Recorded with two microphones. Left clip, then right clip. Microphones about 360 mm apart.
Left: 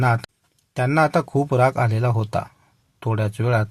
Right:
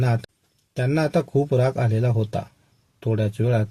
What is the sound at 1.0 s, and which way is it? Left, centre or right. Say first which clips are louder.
Speech: left 3 dB; left.